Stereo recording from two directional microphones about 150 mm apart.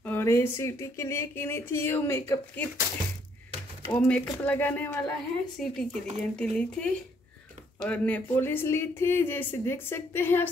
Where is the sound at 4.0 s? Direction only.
10° left (ahead or behind).